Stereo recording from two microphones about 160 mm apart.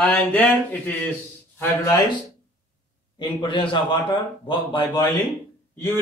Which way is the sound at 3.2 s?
30° left (ahead or behind).